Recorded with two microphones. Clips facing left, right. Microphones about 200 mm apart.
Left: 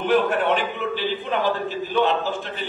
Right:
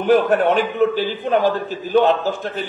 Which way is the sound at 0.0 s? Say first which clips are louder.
Right 5 dB; 45° right (ahead or behind).